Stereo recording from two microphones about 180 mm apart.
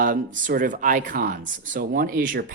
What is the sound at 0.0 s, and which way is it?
Speech, 50° right (ahead or behind).